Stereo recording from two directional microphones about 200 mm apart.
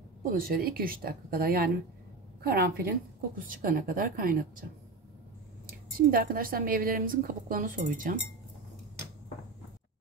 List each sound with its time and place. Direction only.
0.2 s a woman's voice: 45° right (ahead or behind)
5.9 s a woman's voice: 45° right (ahead or behind)